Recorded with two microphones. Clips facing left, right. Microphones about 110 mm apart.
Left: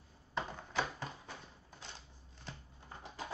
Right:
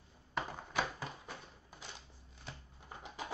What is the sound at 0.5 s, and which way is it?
Typewriter, 15° right (ahead or behind).